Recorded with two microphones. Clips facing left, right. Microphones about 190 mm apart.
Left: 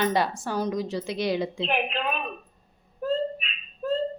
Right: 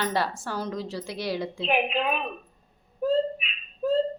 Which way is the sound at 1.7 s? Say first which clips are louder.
Right 7 dB; 10° right (ahead or behind).